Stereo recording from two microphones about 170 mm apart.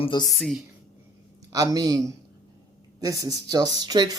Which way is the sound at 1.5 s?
20° right (ahead or behind).